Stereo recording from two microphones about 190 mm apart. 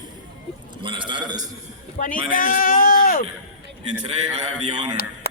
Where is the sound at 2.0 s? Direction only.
45° left (ahead or behind).